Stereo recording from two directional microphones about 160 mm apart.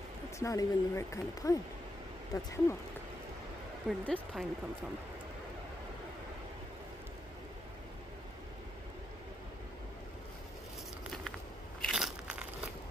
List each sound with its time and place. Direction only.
0.4 s speech: 20° left (ahead or behind)
4.0 s speech: 5° left (ahead or behind)
11.8 s biting: centre (ahead or behind)